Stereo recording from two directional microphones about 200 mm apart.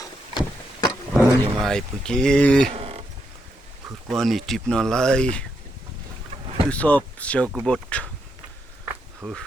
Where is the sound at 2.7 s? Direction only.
30° right (ahead or behind).